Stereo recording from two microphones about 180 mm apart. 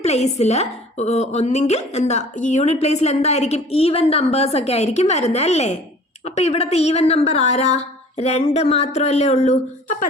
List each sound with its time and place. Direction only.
0.0 s a woman's voice: 35° left (ahead or behind)